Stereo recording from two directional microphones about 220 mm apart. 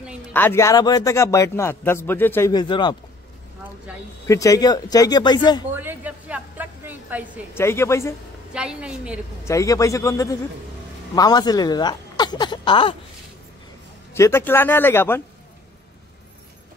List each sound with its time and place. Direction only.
0.3 s a man's voice: 10° left (ahead or behind)
4.3 s a man's voice: 15° left (ahead or behind)
5.8 s a sound: 10° right (ahead or behind)
7.5 s a man's voice: 10° left (ahead or behind)
8.5 s a woman's voice: 5° right (ahead or behind)
9.5 s a man's voice: 15° left (ahead or behind)
14.1 s a man's voice: 10° left (ahead or behind)